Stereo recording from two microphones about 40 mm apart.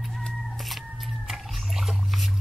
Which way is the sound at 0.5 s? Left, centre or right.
Centre.